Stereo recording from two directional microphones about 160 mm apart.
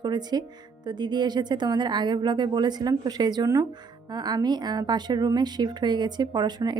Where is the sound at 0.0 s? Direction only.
25° right (ahead or behind).